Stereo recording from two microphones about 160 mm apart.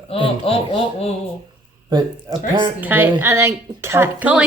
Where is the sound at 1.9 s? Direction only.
25° right (ahead or behind).